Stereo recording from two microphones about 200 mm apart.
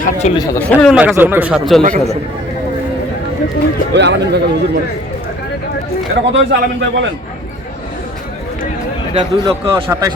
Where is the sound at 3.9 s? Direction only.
60° right (ahead or behind).